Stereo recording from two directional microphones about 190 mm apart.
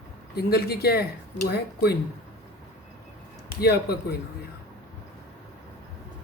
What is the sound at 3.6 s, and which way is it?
Speech, 55° left (ahead or behind).